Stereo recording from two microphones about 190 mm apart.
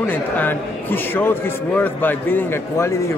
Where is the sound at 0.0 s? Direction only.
10° left (ahead or behind).